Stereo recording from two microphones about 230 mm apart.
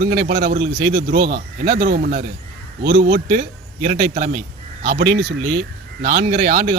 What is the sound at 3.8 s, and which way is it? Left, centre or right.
Speech, right.